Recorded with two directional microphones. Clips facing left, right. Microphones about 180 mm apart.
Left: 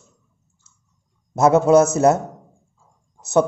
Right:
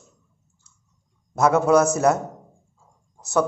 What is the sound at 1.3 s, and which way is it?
Speech, 25° left (ahead or behind).